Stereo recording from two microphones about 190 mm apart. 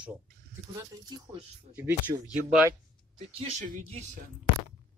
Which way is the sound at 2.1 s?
30° right (ahead or behind).